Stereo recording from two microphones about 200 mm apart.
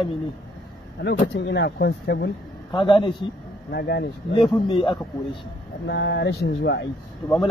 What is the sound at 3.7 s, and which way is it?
Speech, 55° left (ahead or behind).